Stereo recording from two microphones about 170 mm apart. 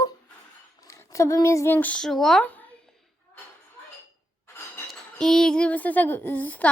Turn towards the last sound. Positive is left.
turn(degrees=10)  # may be behind; listen again after turning